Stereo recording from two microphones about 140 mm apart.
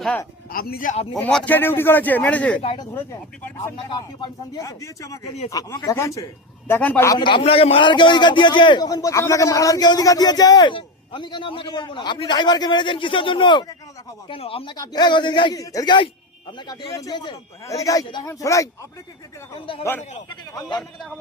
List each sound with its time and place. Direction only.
0.5 s a man's voice: 90° left
1.2 s speech: 10° left (ahead or behind)
3.8 s speech: 30° left (ahead or behind); by 7.1 s 10° left (ahead or behind)
7.2 s a man's voice: 35° left (ahead or behind)
15.5 s speech: 25° left (ahead or behind)
19.5 s a man's voice: 40° left (ahead or behind)
19.8 s speech: 15° left (ahead or behind)
20.6 s a man's voice: 30° left (ahead or behind)